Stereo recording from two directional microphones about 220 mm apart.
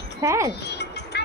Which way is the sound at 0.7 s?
50° left (ahead or behind).